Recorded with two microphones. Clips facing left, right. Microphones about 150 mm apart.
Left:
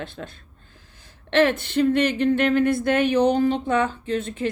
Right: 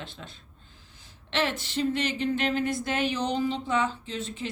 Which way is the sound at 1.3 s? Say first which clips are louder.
Left 10 dB; 55° left (ahead or behind).